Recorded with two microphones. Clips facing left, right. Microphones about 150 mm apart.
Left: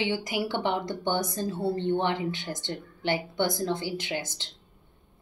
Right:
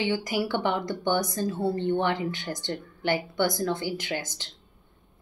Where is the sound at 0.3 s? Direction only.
20° left (ahead or behind).